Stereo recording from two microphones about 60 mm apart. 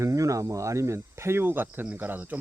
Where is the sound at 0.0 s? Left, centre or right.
Right.